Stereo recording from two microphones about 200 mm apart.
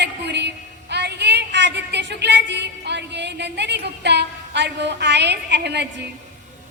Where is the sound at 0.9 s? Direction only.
55° right (ahead or behind).